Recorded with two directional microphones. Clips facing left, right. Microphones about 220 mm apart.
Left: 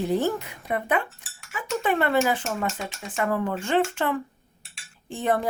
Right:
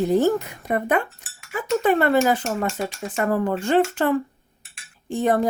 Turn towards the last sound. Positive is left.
turn(degrees=-40)  # may be behind; listen again after turning